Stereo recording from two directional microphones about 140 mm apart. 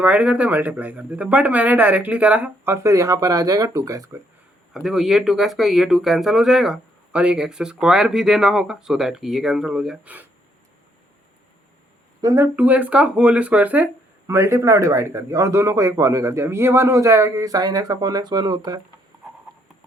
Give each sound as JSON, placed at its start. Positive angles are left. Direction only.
{"t": 0.0, "sound": "speech", "side_deg": -10}
{"t": 4.7, "sound": "speech", "side_deg": 0}
{"t": 12.2, "sound": "speech", "side_deg": -20}